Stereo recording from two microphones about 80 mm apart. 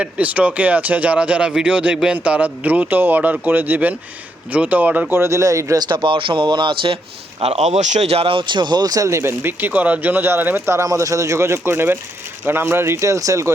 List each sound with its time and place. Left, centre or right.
0.0 s speech: centre
5.1 s speech: right
5.8 s speech: right
8.4 s speech: right
9.0 s speech: right